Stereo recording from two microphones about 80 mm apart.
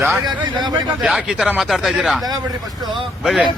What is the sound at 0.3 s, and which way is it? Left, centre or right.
Speech, right.